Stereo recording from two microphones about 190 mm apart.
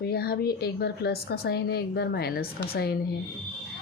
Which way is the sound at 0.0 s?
55° left (ahead or behind).